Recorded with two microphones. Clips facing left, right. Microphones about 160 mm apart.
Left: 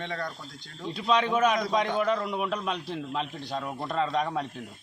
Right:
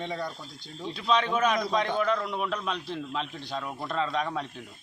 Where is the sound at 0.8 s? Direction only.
5° left (ahead or behind).